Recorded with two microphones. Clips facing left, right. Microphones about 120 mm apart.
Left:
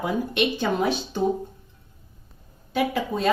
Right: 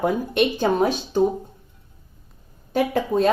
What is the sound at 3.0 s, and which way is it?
Speech, 40° right (ahead or behind).